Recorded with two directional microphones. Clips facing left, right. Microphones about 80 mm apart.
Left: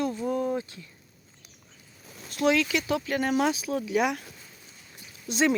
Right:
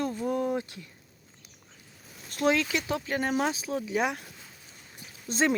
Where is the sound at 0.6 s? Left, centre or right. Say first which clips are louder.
Even; right.